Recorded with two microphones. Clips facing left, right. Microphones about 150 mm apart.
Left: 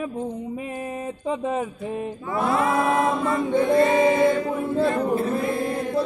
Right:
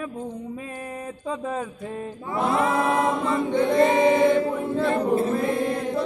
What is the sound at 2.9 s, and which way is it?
A capella, 15° right (ahead or behind).